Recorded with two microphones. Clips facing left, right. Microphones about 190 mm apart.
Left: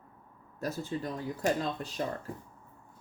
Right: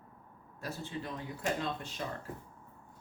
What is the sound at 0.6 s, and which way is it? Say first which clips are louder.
Speech: left 6 dB; 40° left (ahead or behind).